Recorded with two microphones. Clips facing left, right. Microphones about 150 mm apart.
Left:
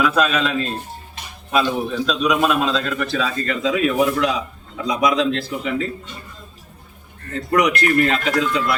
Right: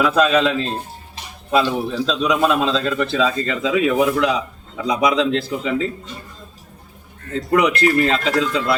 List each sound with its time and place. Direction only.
0.0 s a man's voice: 30° right (ahead or behind)
7.5 s a man's voice: 25° right (ahead or behind)